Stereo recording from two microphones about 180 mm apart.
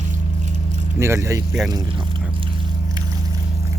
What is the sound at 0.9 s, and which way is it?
Speech, 15° right (ahead or behind).